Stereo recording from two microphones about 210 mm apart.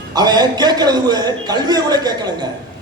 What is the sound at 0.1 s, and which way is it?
A man's voice, 20° right (ahead or behind).